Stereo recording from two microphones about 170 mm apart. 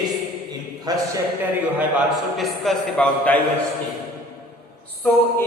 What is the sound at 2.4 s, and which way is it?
A man's voice, 5° left (ahead or behind).